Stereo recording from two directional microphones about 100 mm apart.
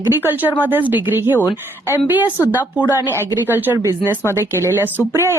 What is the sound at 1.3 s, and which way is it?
Speech, 20° left (ahead or behind).